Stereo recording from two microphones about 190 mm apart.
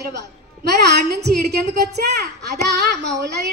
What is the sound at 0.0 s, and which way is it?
A child's voice, 65° right (ahead or behind).